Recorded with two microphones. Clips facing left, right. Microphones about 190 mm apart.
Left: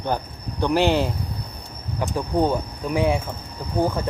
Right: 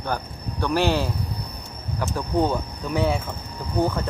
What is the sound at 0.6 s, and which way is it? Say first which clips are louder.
Cricket: left 3 dB; 15° left (ahead or behind).